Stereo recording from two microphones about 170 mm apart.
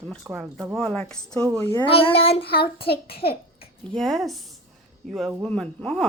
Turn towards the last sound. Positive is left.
turn(degrees=5)  # may be behind; listen again after turning